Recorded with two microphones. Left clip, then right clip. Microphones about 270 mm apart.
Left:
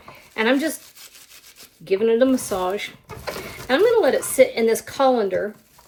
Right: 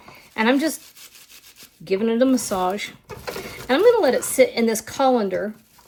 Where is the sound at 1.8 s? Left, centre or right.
Right.